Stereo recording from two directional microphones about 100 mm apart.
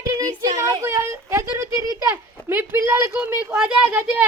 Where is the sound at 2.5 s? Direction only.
25° right (ahead or behind).